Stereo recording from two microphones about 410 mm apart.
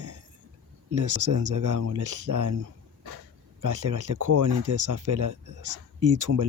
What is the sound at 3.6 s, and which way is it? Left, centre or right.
Speech, right.